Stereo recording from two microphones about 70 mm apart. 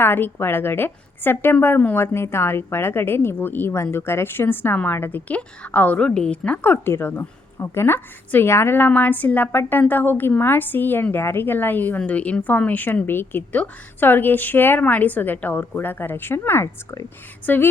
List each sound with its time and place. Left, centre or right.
0.0 s a woman's voice: left
5.3 s a woman's voice: centre